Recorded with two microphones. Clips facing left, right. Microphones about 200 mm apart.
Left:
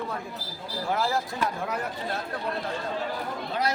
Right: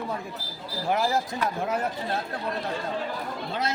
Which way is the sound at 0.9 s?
20° right (ahead or behind).